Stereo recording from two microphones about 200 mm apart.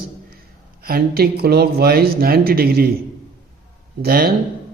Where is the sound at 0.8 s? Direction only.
50° right (ahead or behind).